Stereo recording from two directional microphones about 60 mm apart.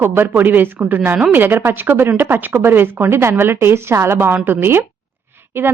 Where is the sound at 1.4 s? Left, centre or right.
Right.